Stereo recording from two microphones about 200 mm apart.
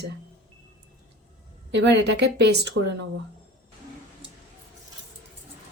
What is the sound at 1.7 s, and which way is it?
Speech, 60° right (ahead or behind).